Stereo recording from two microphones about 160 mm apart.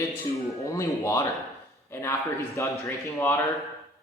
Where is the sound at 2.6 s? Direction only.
15° left (ahead or behind).